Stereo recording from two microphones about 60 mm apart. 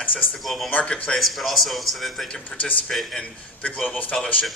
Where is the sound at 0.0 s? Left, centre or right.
Left.